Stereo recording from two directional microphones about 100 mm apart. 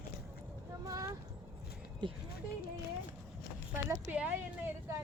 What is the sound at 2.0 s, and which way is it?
Speech, 50° right (ahead or behind).